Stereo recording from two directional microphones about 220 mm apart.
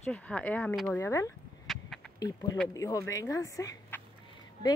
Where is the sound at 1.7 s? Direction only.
Centre (ahead or behind).